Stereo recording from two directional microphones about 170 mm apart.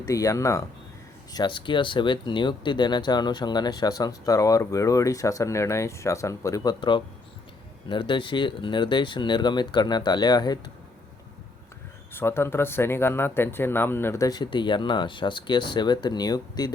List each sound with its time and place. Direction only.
0.0 s speech: 20° left (ahead or behind)
12.1 s speech: 15° left (ahead or behind)